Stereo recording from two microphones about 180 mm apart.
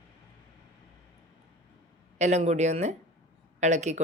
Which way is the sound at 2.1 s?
40° right (ahead or behind).